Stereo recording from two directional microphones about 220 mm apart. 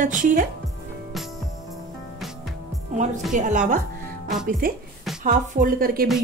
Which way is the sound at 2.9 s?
30° right (ahead or behind).